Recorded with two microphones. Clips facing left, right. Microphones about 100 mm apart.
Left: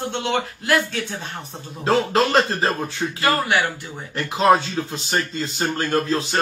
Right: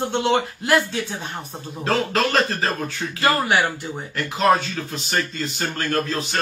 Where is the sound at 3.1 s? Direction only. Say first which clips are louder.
Right 1 dB; 15° right (ahead or behind).